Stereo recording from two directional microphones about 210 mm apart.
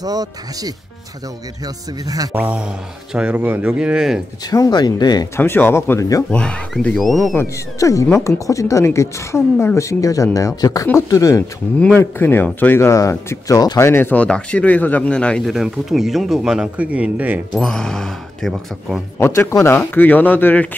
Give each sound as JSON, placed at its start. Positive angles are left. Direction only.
{"t": 0.0, "sound": "speech", "side_deg": -15}
{"t": 2.0, "sound": "speech", "side_deg": -10}
{"t": 4.5, "sound": "a woman's voice", "side_deg": 20}
{"t": 7.8, "sound": "a woman's voice", "side_deg": 15}
{"t": 19.1, "sound": "a woman's voice", "side_deg": 10}